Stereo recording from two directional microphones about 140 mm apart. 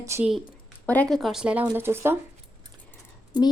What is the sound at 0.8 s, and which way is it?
Speech, 10° left (ahead or behind).